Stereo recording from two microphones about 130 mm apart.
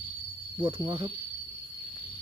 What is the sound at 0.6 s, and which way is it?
Cricket, 30° right (ahead or behind).